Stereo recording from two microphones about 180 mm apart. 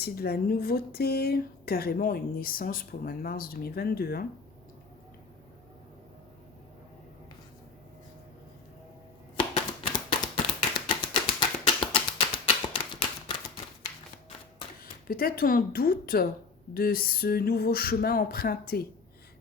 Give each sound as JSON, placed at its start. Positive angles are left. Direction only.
{"t": 0.0, "sound": "speech", "side_deg": 60}
{"t": 10.1, "sound": "tap", "side_deg": 25}
{"t": 12.7, "sound": "typewriter", "side_deg": 25}
{"t": 15.0, "sound": "speech", "side_deg": 55}